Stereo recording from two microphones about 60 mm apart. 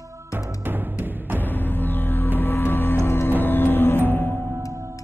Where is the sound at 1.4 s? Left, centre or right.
Left.